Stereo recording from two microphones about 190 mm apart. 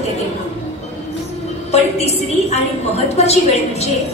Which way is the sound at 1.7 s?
35° left (ahead or behind).